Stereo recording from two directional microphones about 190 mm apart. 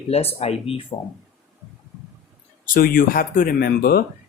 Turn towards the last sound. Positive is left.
turn(degrees=55)  # may be behind; listen again after turning